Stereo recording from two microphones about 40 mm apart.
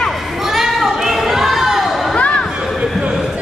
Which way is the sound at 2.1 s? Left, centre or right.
Left.